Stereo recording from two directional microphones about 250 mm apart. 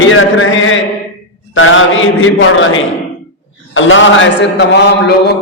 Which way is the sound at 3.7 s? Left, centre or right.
Left.